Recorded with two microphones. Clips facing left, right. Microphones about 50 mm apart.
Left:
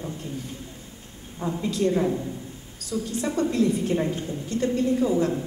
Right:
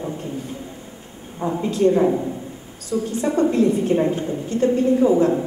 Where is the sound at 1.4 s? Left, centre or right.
Right.